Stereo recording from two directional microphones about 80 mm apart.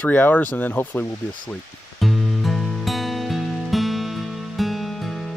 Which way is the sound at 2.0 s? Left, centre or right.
Centre.